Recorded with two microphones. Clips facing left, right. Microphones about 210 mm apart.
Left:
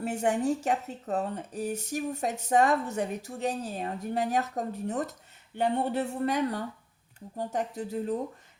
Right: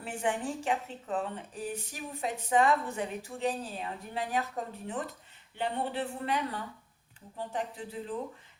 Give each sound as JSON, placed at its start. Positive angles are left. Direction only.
{"t": 0.0, "sound": "a woman's voice", "side_deg": 40}